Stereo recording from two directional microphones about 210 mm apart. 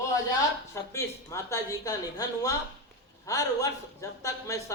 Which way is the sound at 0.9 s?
15° left (ahead or behind).